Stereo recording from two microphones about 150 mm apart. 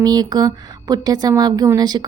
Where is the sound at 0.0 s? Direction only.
25° right (ahead or behind).